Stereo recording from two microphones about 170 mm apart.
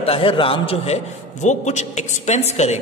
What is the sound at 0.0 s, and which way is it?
A man's voice, 35° left (ahead or behind).